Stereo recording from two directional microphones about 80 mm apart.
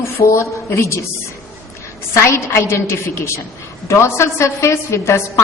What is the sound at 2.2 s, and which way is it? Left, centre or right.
A woman's voice, left.